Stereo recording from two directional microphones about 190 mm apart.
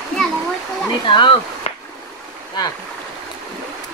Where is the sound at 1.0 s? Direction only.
25° left (ahead or behind).